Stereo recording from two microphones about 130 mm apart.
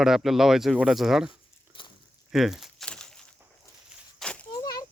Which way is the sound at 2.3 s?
Centre (ahead or behind).